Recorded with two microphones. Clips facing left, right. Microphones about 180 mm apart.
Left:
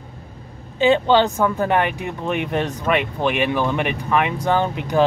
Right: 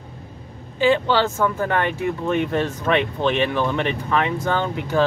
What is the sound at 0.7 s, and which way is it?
Speech, 20° left (ahead or behind).